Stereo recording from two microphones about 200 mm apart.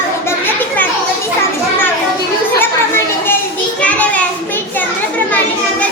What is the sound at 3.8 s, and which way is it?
Child singing, 5° left (ahead or behind).